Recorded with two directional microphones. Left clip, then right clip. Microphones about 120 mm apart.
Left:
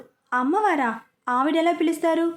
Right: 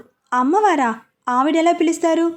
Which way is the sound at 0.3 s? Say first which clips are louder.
Right 6 dB; 30° right (ahead or behind).